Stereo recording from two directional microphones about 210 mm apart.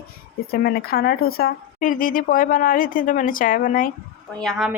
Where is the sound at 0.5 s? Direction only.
45° left (ahead or behind).